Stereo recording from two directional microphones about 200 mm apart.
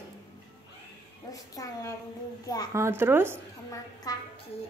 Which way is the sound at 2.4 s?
20° left (ahead or behind).